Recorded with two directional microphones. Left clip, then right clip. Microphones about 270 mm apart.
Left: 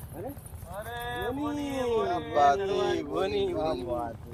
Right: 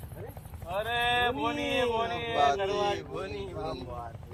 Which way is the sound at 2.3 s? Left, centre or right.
Centre.